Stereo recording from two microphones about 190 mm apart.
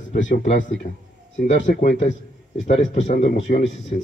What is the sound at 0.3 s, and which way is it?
Speech, 40° left (ahead or behind).